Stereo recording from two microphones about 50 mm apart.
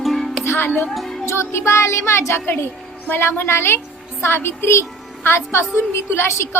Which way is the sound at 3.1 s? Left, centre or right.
Left.